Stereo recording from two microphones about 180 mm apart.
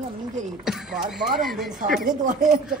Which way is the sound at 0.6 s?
Centre (ahead or behind).